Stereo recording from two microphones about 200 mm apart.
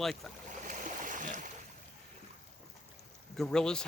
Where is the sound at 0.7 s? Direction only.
40° right (ahead or behind).